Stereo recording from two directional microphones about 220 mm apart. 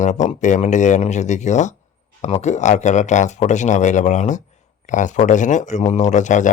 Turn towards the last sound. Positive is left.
turn(degrees=35)  # may be behind; listen again after turning